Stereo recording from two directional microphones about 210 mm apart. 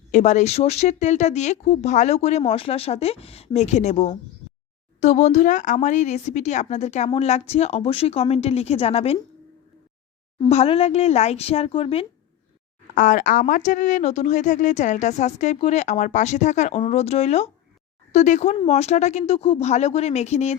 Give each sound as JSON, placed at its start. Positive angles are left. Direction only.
{"t": 0.1, "sound": "speech", "side_deg": 35}
{"t": 10.4, "sound": "speech", "side_deg": 30}
{"t": 12.9, "sound": "speech", "side_deg": 40}